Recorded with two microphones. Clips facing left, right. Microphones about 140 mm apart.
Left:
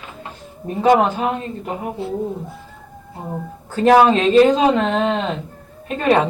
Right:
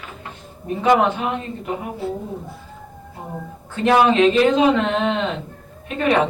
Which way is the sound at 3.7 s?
35° left (ahead or behind).